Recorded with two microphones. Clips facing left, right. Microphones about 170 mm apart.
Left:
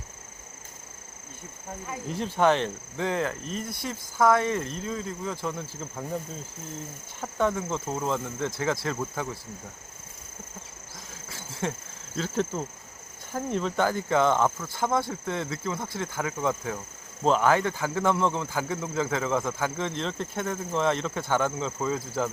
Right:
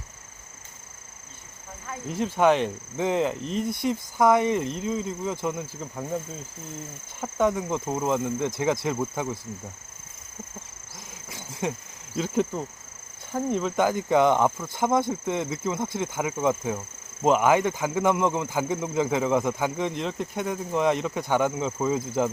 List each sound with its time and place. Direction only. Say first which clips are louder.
2.0 s speech: right 2 dB; 10° right (ahead or behind)
7.2 s speech: right 3 dB; 15° right (ahead or behind)
11.3 s a sound: right 2 dB; 15° right (ahead or behind)
12.1 s speech: right 3 dB; 10° right (ahead or behind)
13.8 s speech: right 3 dB; 15° right (ahead or behind)